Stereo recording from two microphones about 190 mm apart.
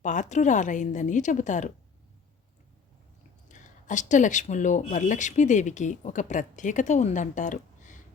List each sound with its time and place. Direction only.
0.0 s speech: 40° left (ahead or behind)
3.5 s speech: 40° left (ahead or behind)